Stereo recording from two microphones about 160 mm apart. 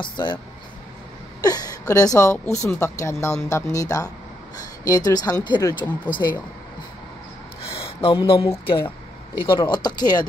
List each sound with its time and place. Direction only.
0.0 s speech: 30° left (ahead or behind)
1.4 s a woman's voice: 25° left (ahead or behind)
7.8 s a sound: 35° left (ahead or behind)
8.2 s speech: 25° left (ahead or behind)